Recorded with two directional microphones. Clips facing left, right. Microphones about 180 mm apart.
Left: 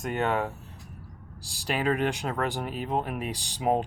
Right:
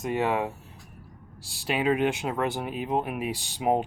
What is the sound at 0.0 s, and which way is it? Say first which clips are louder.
Speech: right 1 dB; 5° right (ahead or behind).